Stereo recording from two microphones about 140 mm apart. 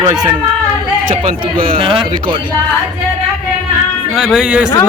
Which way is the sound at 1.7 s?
40° right (ahead or behind).